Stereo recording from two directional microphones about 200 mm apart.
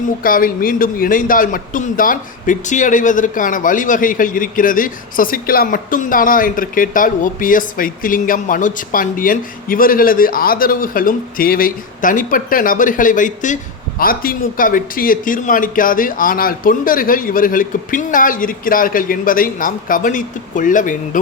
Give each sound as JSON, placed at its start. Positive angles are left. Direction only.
{"t": 0.2, "sound": "a man's voice", "side_deg": 45}